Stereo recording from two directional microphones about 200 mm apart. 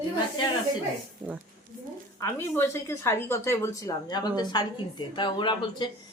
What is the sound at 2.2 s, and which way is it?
A woman's voice, 15° left (ahead or behind).